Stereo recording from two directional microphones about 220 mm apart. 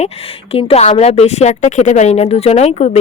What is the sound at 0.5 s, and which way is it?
A woman's voice, 30° left (ahead or behind).